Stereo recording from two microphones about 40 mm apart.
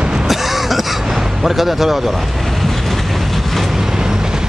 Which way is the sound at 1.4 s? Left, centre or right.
Centre.